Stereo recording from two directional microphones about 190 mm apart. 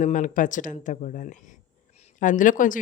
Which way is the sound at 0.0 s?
40° left (ahead or behind).